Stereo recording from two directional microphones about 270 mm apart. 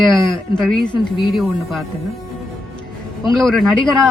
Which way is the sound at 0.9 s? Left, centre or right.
Centre.